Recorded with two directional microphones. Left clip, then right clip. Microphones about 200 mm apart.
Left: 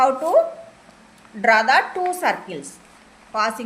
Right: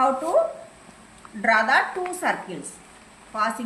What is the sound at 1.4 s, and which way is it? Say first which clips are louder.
A woman's voice: left 4 dB; 50° left (ahead or behind).